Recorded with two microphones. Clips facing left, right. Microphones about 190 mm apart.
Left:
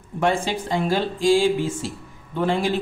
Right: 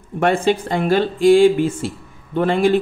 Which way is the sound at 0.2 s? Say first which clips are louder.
Right 5 dB; 60° right (ahead or behind).